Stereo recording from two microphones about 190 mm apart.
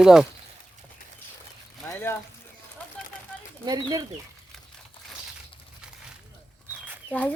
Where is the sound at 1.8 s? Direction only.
10° left (ahead or behind).